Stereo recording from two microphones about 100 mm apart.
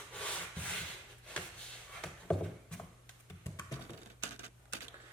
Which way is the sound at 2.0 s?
10° left (ahead or behind).